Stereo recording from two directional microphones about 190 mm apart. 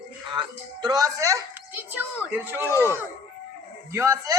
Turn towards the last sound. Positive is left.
turn(degrees=-15)  # may be behind; listen again after turning